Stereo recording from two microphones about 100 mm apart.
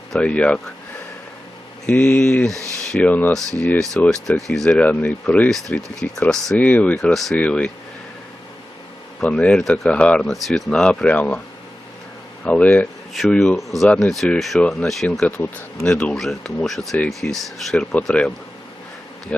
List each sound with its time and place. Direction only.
0.1 s speech: 10° left (ahead or behind)
1.9 s speech: 10° left (ahead or behind)
2.5 s speech: 35° right (ahead or behind)
2.9 s speech: 15° left (ahead or behind)
6.6 s speech: 15° left (ahead or behind)
9.2 s speech: 10° left (ahead or behind)
12.5 s speech: 10° left (ahead or behind)
13.8 s speech: 10° left (ahead or behind)
14.3 s speech: centre (ahead or behind)
14.6 s speech: 10° left (ahead or behind)
15.9 s speech: 5° left (ahead or behind)